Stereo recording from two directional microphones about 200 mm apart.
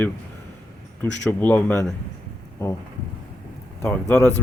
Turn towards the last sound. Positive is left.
turn(degrees=5)  # may be behind; listen again after turning